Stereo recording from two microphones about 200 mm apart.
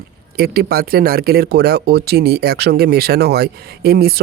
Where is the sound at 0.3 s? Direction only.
50° right (ahead or behind).